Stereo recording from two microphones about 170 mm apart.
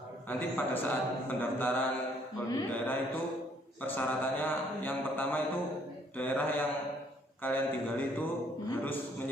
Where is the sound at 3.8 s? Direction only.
10° left (ahead or behind).